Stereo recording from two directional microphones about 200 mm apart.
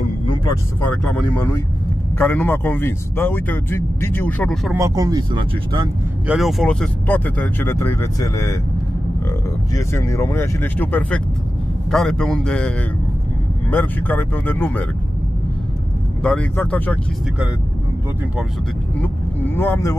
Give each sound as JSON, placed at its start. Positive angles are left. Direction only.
{"t": 0.8, "sound": "speech", "side_deg": 5}
{"t": 4.7, "sound": "speech", "side_deg": -15}
{"t": 6.2, "sound": "speech", "side_deg": 0}
{"t": 9.8, "sound": "a man's voice", "side_deg": 15}
{"t": 16.2, "sound": "speech", "side_deg": 5}
{"t": 18.9, "sound": "speech", "side_deg": 10}